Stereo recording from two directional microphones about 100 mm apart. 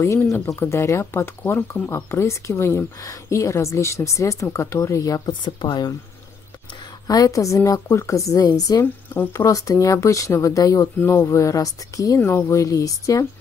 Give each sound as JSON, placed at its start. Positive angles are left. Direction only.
{"t": 0.6, "sound": "speech", "side_deg": 25}
{"t": 5.4, "sound": "speech", "side_deg": 50}
{"t": 7.1, "sound": "speech", "side_deg": 35}
{"t": 9.1, "sound": "speech", "side_deg": 25}
{"t": 11.0, "sound": "speech", "side_deg": 25}
{"t": 12.2, "sound": "speech", "side_deg": 25}